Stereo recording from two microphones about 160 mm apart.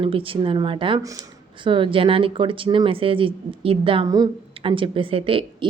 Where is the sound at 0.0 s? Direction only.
35° right (ahead or behind).